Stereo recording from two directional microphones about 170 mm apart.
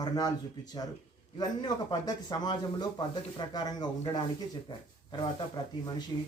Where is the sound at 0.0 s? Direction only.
25° left (ahead or behind).